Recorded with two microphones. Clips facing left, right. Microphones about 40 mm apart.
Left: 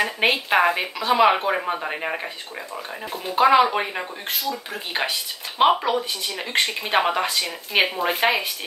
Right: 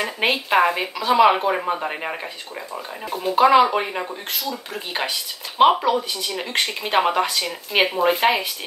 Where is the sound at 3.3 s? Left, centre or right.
Centre.